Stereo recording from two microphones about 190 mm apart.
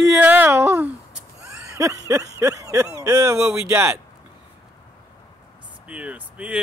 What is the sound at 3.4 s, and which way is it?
Speech, 15° right (ahead or behind).